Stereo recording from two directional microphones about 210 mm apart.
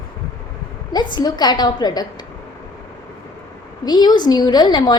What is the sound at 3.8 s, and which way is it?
A woman's voice, 20° left (ahead or behind).